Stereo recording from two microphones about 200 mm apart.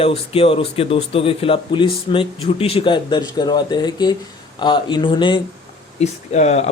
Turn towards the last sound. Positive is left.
turn(degrees=35)  # may be behind; listen again after turning